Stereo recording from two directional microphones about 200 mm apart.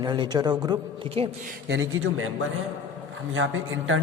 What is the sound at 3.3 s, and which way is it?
Speech, 75° right (ahead or behind).